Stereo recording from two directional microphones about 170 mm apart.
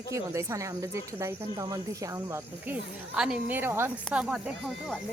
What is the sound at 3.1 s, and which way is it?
Speech, 5° right (ahead or behind).